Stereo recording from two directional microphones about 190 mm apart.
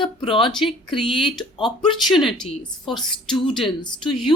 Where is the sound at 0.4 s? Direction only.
Centre (ahead or behind).